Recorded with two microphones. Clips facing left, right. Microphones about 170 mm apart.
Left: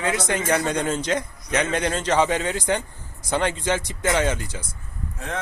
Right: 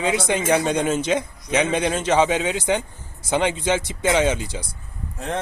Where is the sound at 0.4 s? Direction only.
20° right (ahead or behind).